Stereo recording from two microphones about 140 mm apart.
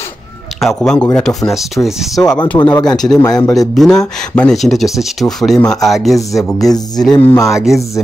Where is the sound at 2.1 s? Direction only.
25° left (ahead or behind).